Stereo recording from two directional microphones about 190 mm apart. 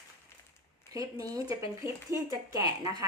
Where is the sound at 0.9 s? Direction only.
20° right (ahead or behind).